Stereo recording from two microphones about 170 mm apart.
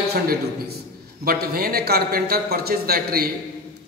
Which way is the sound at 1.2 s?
60° right (ahead or behind).